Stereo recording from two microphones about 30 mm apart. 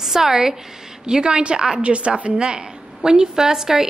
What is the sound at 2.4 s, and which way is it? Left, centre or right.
A woman's voice, right.